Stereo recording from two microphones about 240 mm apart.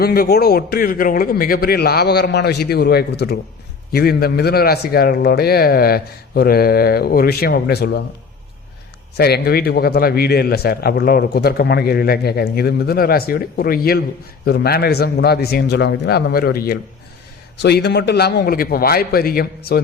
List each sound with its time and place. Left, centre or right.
0.0 s a man's voice: left
9.1 s a man's voice: left